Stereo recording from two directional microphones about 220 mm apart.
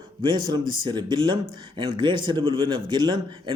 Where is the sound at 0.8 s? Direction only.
20° right (ahead or behind).